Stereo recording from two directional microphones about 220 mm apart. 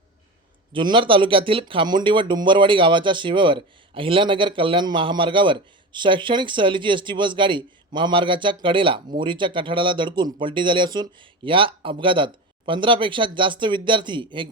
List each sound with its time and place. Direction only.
0.7 s speech: 20° right (ahead or behind)